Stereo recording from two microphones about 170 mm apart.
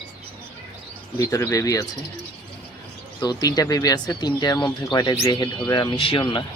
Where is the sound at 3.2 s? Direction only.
25° left (ahead or behind).